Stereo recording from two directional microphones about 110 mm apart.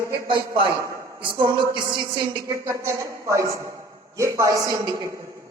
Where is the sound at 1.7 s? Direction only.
45° right (ahead or behind).